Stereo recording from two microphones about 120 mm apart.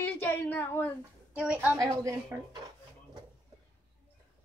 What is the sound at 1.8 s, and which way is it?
Speech, 25° right (ahead or behind).